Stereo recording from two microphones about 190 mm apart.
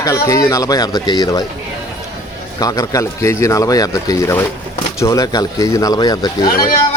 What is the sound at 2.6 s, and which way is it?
Speech, 20° left (ahead or behind).